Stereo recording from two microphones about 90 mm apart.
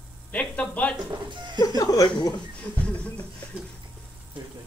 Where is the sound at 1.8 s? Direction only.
45° left (ahead or behind).